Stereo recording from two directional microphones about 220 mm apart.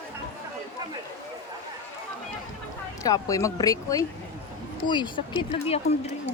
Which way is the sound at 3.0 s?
15° left (ahead or behind).